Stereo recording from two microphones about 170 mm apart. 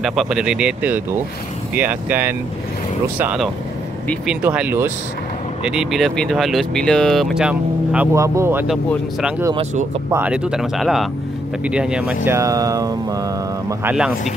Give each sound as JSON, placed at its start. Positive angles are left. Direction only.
{"t": 0.0, "sound": "speech", "side_deg": 0}
{"t": 8.1, "sound": "speech", "side_deg": -15}
{"t": 10.1, "sound": "speech", "side_deg": -5}
{"t": 12.3, "sound": "speech", "side_deg": -20}
{"t": 13.9, "sound": "speech", "side_deg": -5}